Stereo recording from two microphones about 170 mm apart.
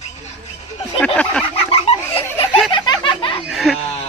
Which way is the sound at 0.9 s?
5° left (ahead or behind).